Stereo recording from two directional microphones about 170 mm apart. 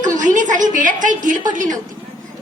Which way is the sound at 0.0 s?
50° right (ahead or behind).